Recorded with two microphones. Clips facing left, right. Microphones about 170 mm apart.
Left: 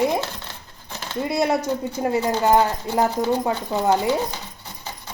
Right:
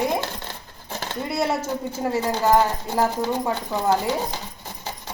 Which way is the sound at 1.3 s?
15° left (ahead or behind).